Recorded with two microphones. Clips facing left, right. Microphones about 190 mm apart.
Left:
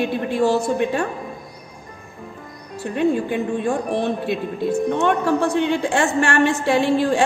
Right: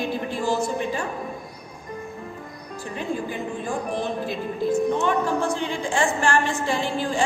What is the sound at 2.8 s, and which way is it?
A woman's voice, 65° left (ahead or behind).